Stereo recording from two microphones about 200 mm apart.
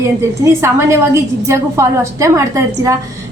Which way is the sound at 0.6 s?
15° right (ahead or behind).